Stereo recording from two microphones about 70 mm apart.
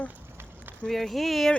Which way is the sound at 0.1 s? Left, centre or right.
Right.